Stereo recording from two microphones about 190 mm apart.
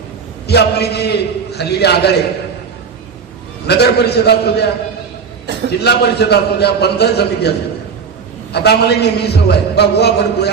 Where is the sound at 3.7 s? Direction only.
60° left (ahead or behind).